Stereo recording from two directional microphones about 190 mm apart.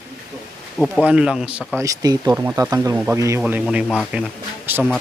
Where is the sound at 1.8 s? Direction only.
20° right (ahead or behind).